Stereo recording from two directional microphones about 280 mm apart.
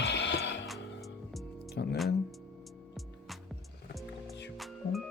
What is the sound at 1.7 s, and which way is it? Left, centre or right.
Music, left.